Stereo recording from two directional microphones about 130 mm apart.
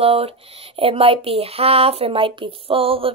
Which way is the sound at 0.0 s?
50° right (ahead or behind).